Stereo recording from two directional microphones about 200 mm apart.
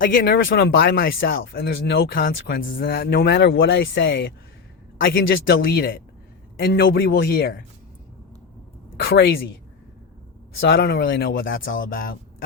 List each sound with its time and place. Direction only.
0.0 s speech: 45° left (ahead or behind)
0.3 s a woman's voice: 60° left (ahead or behind)
5.5 s speech: 50° left (ahead or behind)
9.0 s speech: 50° left (ahead or behind)
10.6 s speech: 60° left (ahead or behind)
11.4 s a woman's voice: 70° left (ahead or behind)
11.7 s speech: 45° left (ahead or behind)